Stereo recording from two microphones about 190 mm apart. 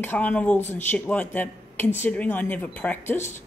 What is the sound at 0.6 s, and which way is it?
Speech, 35° left (ahead or behind).